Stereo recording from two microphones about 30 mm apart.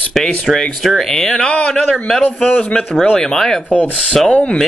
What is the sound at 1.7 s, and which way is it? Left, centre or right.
Speech, centre.